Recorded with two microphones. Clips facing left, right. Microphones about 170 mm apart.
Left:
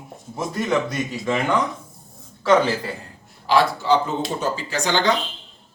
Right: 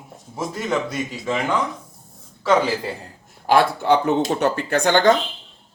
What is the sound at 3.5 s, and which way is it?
Speech, 55° right (ahead or behind).